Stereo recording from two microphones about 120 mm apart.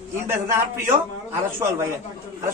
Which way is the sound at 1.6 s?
25° right (ahead or behind).